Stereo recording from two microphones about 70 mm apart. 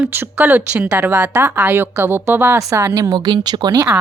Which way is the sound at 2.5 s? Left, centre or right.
Right.